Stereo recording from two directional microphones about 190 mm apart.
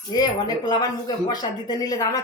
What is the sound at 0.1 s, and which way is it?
A man's voice, 20° left (ahead or behind).